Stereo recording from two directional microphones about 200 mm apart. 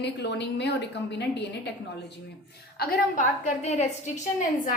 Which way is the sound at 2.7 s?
50° left (ahead or behind).